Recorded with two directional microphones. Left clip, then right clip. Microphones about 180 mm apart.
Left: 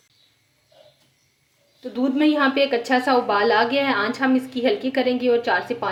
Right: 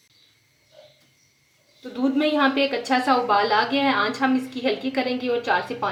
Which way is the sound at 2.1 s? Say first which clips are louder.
Left 2 dB; 40° left (ahead or behind).